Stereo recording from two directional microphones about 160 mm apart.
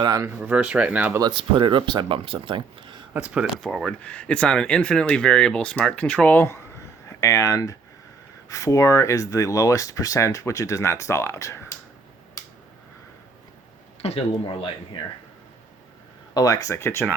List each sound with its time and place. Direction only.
0.0 s speech: 25° right (ahead or behind)
0.4 s speech: 5° right (ahead or behind)
1.2 s speech: 30° right (ahead or behind)
3.1 s speech: 5° right (ahead or behind); by 11.7 s 15° left (ahead or behind)
14.0 s speech: 40° left (ahead or behind)
16.3 s speech: 20° left (ahead or behind)